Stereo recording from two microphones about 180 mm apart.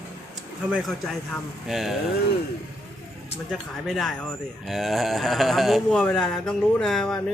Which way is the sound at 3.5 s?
Centre (ahead or behind).